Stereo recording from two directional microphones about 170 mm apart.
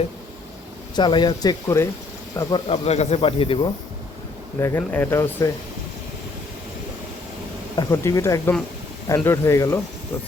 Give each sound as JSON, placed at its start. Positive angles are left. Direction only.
{"t": 0.9, "sound": "speech", "side_deg": 25}
{"t": 2.6, "sound": "speech", "side_deg": 40}
{"t": 4.8, "sound": "speech", "side_deg": 10}
{"t": 7.8, "sound": "speech", "side_deg": 20}